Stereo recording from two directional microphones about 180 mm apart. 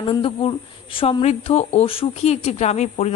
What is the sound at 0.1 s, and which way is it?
A woman's voice, 30° left (ahead or behind).